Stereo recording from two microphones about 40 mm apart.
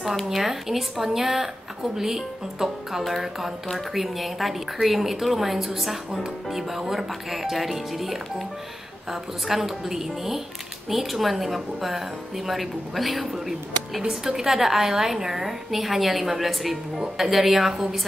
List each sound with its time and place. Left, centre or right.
0.0 s a woman's voice: centre